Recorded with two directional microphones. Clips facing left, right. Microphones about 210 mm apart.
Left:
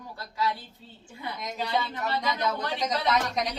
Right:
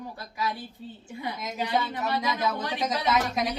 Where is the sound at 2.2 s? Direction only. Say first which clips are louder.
Right 1 dB; 5° right (ahead or behind).